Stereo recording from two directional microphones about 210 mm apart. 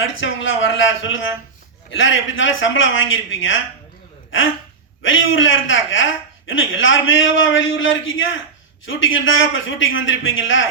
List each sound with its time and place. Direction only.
0.0 s a man's voice: 65° left (ahead or behind)
5.0 s a man's voice: 65° left (ahead or behind)